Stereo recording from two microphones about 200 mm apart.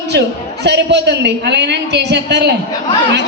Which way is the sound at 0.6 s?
55° right (ahead or behind).